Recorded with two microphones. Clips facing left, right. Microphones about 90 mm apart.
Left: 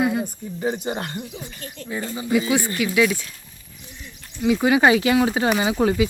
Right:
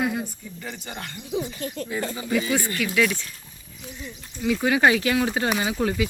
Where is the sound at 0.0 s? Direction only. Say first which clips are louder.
Left 4 dB; 5° left (ahead or behind).